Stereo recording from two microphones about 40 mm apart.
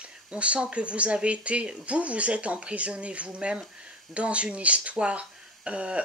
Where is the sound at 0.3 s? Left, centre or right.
Right.